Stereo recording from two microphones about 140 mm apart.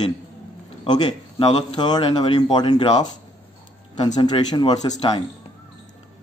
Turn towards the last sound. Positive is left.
turn(degrees=35)  # may be behind; listen again after turning